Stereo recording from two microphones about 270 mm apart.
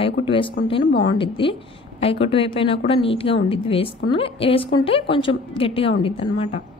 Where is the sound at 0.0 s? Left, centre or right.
Centre.